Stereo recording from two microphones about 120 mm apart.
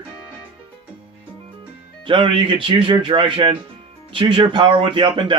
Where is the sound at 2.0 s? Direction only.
45° right (ahead or behind).